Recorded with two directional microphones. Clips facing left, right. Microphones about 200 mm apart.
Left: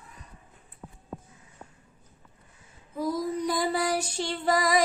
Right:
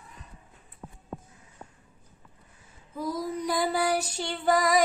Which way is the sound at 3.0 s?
25° left (ahead or behind).